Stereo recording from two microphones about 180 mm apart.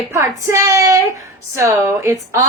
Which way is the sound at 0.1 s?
15° right (ahead or behind).